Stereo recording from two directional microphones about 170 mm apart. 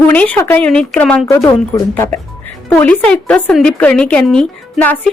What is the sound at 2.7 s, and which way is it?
A woman's voice, 10° left (ahead or behind).